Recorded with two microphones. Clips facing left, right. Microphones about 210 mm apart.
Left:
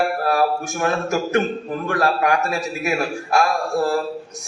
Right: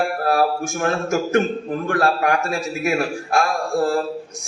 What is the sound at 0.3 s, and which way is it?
A man's voice, 45° right (ahead or behind).